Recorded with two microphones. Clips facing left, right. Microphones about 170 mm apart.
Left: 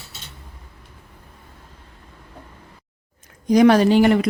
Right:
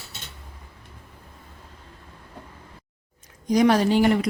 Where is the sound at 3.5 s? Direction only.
65° left (ahead or behind).